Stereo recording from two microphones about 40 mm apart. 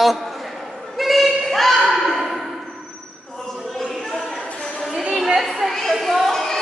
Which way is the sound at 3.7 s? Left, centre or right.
Centre.